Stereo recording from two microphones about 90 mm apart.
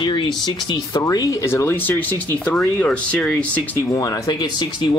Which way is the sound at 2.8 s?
15° left (ahead or behind).